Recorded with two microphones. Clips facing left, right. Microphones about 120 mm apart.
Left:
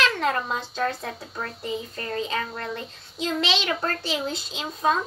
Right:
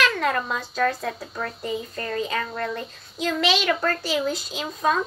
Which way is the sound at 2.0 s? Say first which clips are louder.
Right 1 dB; 25° left (ahead or behind).